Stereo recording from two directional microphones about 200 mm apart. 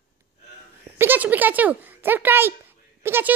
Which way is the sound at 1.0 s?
10° right (ahead or behind).